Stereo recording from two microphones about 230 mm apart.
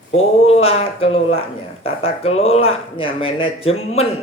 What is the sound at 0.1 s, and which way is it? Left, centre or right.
Speech, left.